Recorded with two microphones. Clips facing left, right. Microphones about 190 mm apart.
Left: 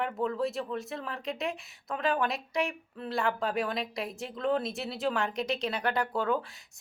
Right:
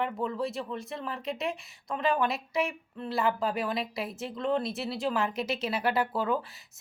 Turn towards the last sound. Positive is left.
turn(degrees=-5)  # may be behind; listen again after turning